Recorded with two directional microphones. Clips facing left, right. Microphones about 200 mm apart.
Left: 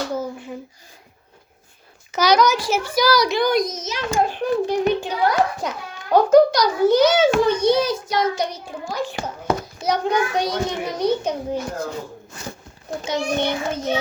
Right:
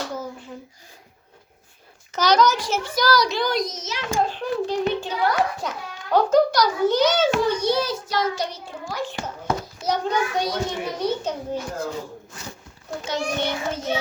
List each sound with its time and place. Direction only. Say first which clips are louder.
2.1 s a child's voice: left 2 dB; 10° left (ahead or behind)
7.4 s a child's voice: left 4 dB; 20° left (ahead or behind)
12.9 s a child's voice: left 3 dB; 15° left (ahead or behind)